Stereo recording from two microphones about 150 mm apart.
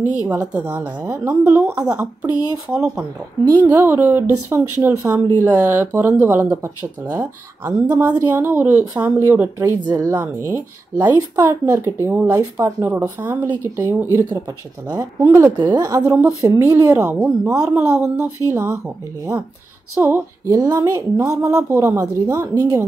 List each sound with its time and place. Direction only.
0.3 s a woman's voice: 10° right (ahead or behind)
11.0 s a woman's voice: 25° right (ahead or behind)
14.9 s a woman's voice: 25° right (ahead or behind)
15.5 s a woman's voice: 30° right (ahead or behind)
20.0 s a woman's voice: 15° right (ahead or behind)
20.6 s a woman's voice: 25° right (ahead or behind)